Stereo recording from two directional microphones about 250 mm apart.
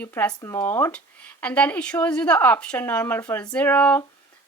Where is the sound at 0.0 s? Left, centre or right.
Centre.